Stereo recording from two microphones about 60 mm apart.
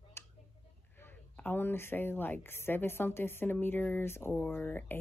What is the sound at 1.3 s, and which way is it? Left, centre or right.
Speech, left.